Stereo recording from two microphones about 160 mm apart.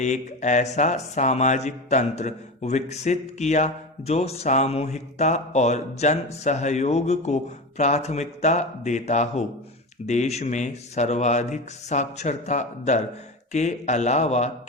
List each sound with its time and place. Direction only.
0.0 s speech: 50° left (ahead or behind)